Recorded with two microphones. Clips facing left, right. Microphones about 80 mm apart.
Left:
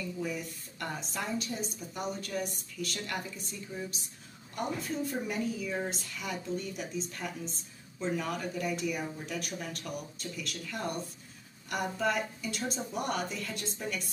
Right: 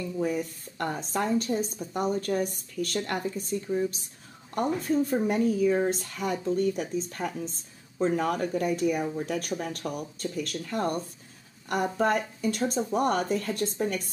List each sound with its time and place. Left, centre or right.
0.2 s a woman's voice: right